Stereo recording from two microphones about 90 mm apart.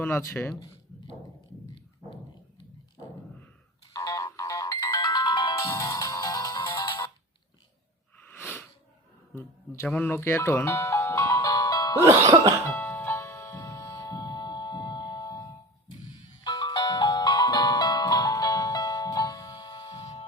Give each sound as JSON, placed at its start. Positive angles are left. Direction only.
{"t": 0.0, "sound": "speech", "side_deg": 30}
{"t": 3.9, "sound": "ringtone", "side_deg": 40}
{"t": 5.6, "sound": "music", "side_deg": 40}
{"t": 8.3, "sound": "a sound", "side_deg": 20}
{"t": 9.8, "sound": "music", "side_deg": 20}
{"t": 12.0, "sound": "music", "side_deg": -35}
{"t": 12.6, "sound": "music", "side_deg": 20}
{"t": 13.9, "sound": "music", "side_deg": 45}